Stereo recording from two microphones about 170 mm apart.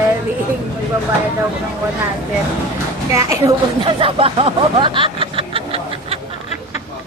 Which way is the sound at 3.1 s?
20° right (ahead or behind).